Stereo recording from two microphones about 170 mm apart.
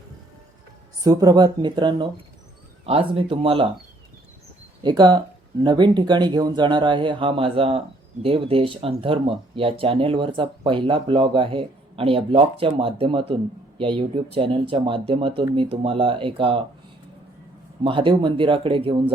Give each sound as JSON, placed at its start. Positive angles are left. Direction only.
{"t": 1.0, "sound": "speech", "side_deg": -20}
{"t": 4.8, "sound": "speech", "side_deg": -25}
{"t": 17.8, "sound": "speech", "side_deg": -30}